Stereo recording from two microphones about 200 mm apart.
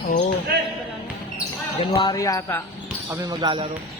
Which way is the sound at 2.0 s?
20° left (ahead or behind).